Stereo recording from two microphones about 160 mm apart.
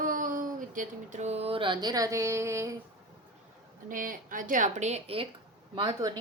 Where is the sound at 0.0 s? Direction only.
55° right (ahead or behind); by 2.7 s 20° right (ahead or behind).